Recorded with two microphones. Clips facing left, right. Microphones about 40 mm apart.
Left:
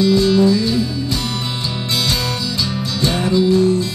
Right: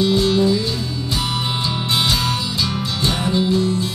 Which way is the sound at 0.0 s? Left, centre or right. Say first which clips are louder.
Left 3 dB; right.